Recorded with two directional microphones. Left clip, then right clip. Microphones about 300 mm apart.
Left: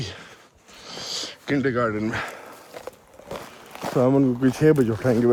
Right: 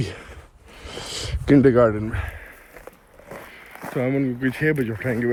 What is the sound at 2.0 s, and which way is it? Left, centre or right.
Speech, left.